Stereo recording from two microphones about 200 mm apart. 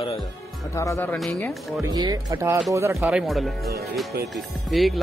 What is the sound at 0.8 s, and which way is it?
Speech, 10° left (ahead or behind).